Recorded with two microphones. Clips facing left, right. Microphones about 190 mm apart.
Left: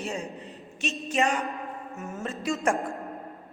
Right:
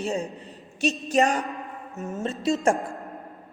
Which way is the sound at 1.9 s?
20° right (ahead or behind).